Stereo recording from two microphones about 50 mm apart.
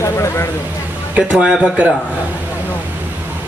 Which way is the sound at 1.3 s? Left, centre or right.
Right.